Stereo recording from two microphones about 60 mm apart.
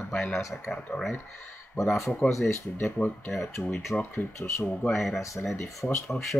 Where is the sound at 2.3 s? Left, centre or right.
Left.